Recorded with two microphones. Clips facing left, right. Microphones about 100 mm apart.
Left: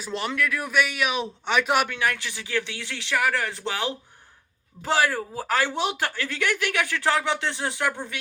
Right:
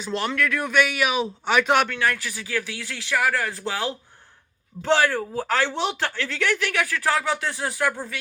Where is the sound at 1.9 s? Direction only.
20° left (ahead or behind).